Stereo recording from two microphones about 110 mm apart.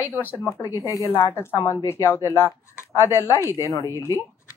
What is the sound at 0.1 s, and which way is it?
Speech, 15° left (ahead or behind).